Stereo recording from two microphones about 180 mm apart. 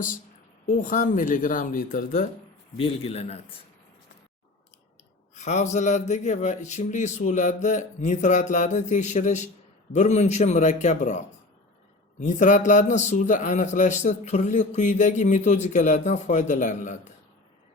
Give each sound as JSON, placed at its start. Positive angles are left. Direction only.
{"t": 0.6, "sound": "speech", "side_deg": 45}
{"t": 2.7, "sound": "a man's voice", "side_deg": 35}
{"t": 5.3, "sound": "a man's voice", "side_deg": 40}
{"t": 12.2, "sound": "a man's voice", "side_deg": 45}